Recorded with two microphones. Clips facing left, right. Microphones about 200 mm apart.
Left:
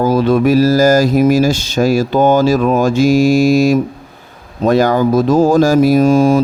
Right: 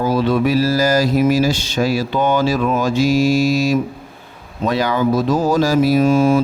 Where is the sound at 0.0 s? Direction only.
45° left (ahead or behind).